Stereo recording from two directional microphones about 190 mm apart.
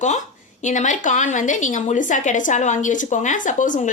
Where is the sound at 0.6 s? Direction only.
40° left (ahead or behind).